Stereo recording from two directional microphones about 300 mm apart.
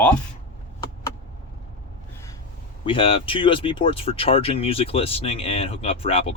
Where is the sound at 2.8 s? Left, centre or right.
Centre.